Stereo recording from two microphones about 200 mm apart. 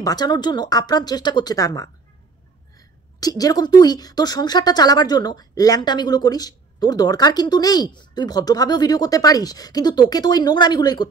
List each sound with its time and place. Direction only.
0.0 s a woman's voice: 20° left (ahead or behind)
3.2 s a woman's voice: 20° left (ahead or behind)